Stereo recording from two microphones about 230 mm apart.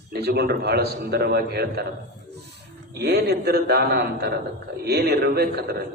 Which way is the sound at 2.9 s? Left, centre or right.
Right.